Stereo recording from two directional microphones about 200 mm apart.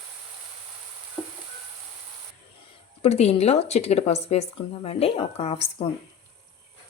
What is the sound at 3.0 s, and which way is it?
Speech, 30° left (ahead or behind).